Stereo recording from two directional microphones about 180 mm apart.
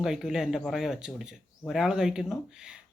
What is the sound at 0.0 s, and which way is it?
Speech, 5° right (ahead or behind).